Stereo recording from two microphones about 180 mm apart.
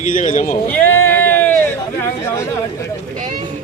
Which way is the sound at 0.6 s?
10° left (ahead or behind).